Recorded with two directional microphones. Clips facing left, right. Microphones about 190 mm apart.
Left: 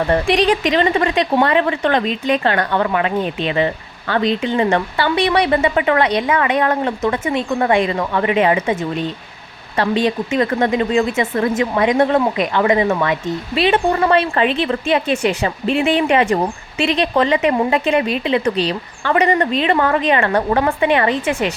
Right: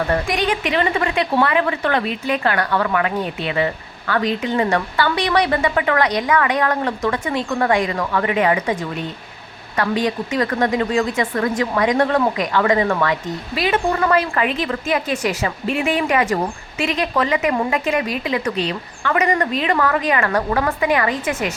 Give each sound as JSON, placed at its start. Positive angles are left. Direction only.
{"t": 0.1, "sound": "a woman's voice", "side_deg": 30}